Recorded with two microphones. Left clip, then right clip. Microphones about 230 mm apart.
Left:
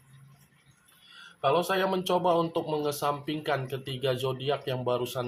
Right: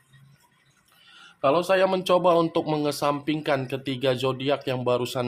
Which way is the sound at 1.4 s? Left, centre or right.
Right.